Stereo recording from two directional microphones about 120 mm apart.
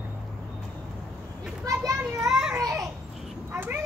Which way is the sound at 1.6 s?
30° right (ahead or behind).